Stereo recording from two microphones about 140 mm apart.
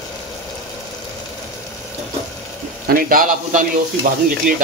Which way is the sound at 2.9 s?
90° right.